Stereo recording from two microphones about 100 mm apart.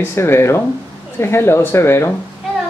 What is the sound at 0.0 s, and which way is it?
Speech, 25° left (ahead or behind).